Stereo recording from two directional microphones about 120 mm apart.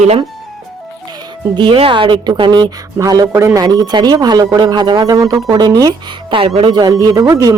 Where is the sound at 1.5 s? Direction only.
45° right (ahead or behind).